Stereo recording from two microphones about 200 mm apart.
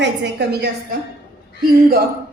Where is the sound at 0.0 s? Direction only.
60° right (ahead or behind).